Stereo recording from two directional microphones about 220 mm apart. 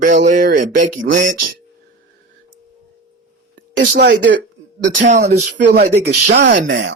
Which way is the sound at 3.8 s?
45° right (ahead or behind).